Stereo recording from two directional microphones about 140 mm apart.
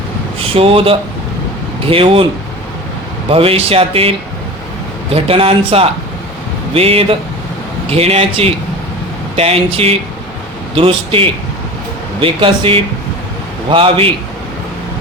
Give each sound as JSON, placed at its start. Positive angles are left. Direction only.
{"t": 0.3, "sound": "speech", "side_deg": -40}
{"t": 3.2, "sound": "speech", "side_deg": -40}
{"t": 5.1, "sound": "speech", "side_deg": -45}